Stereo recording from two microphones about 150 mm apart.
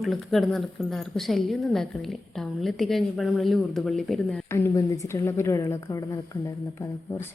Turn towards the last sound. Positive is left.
turn(degrees=15)  # may be behind; listen again after turning